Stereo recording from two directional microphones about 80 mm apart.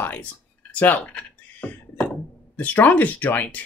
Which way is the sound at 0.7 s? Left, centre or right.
Centre.